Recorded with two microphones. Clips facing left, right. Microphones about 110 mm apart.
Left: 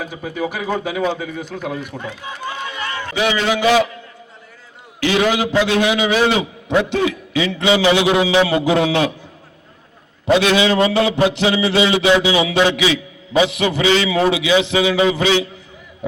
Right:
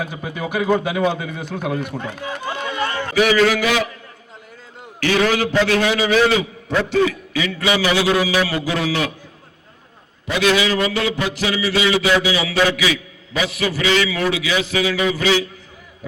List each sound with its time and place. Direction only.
0.0 s a man's voice: centre (ahead or behind)
1.7 s speech: 50° right (ahead or behind)
2.6 s a sound: 40° right (ahead or behind)
3.2 s a man's voice: 25° left (ahead or behind)
4.9 s a man's voice: 20° left (ahead or behind)
10.3 s a man's voice: 25° left (ahead or behind)